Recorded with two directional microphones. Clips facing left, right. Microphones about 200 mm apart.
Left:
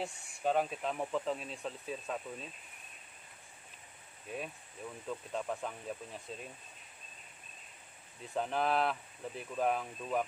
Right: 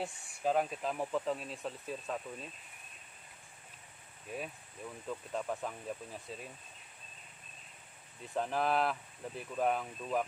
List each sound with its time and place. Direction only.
0.0 s speech: centre (ahead or behind)
5.0 s speech: centre (ahead or behind)
8.3 s speech: centre (ahead or behind)